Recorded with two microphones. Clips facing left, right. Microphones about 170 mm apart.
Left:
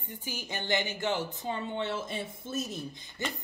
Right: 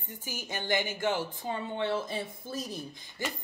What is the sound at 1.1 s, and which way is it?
Speech, 20° left (ahead or behind).